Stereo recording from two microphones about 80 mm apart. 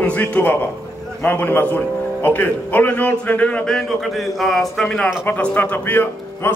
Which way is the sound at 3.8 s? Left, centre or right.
Centre.